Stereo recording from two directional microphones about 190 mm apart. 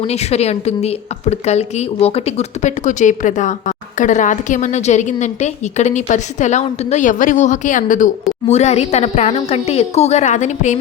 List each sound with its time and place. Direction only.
0.0 s a woman's voice: 35° left (ahead or behind)